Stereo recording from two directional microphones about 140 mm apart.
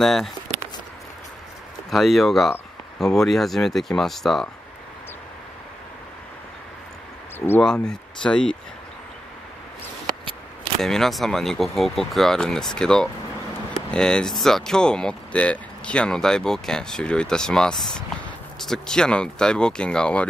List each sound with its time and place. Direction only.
0.0 s speech: centre (ahead or behind)
1.9 s speech: centre (ahead or behind)
7.3 s speech: 15° left (ahead or behind)
7.6 s speech: 5° left (ahead or behind)
10.8 s speech: 5° left (ahead or behind)